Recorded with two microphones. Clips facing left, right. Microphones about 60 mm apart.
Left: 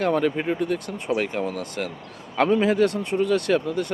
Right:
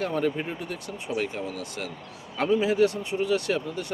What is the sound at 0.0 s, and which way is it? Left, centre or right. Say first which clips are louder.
Speech: left 5 dB; left.